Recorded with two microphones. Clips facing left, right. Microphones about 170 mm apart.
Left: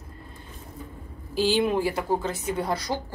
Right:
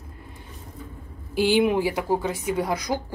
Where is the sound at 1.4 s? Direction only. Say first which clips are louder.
Right 3 dB; 15° right (ahead or behind).